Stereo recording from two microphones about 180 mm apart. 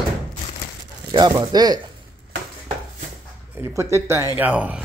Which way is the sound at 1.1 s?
25° right (ahead or behind).